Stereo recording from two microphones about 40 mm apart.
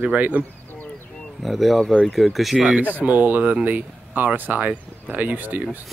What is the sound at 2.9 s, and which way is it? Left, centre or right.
Speech, right.